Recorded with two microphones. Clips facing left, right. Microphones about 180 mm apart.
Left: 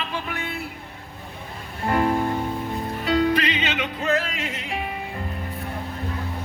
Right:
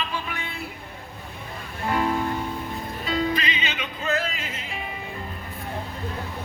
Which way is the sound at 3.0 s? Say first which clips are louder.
Left 5 dB; 70° left (ahead or behind).